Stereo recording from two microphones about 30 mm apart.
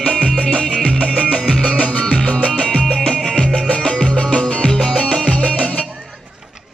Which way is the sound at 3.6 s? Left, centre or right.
Left.